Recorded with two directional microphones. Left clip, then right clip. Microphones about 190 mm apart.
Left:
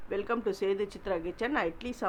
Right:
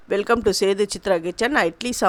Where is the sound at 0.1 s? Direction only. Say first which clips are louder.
Right 12 dB; 45° right (ahead or behind).